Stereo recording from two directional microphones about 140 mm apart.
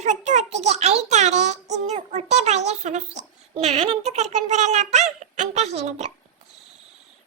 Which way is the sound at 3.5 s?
45° right (ahead or behind).